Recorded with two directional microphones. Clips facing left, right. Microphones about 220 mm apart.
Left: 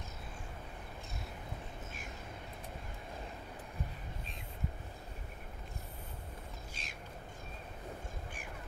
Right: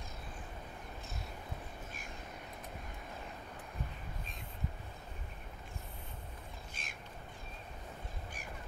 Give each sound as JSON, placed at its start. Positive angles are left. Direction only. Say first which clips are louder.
{"t": 6.7, "sound": "bird", "louder": "left 1 dB", "side_deg": -50}